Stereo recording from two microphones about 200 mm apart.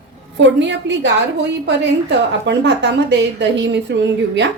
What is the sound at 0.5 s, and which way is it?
Speech, 65° right (ahead or behind).